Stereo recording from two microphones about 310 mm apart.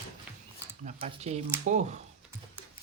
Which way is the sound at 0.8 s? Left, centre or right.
Right.